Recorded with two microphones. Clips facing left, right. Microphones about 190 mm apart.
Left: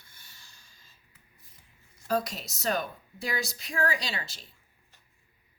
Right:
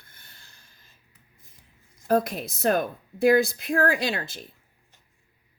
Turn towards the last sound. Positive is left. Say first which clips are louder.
# right 9 dB
turn(degrees=-55)  # may be behind; listen again after turning